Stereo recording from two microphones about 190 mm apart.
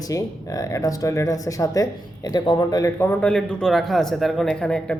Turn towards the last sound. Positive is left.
turn(degrees=5)  # may be behind; listen again after turning